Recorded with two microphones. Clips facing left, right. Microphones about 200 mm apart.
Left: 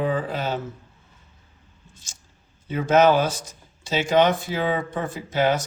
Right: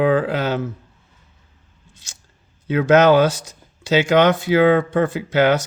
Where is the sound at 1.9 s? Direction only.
70° right (ahead or behind).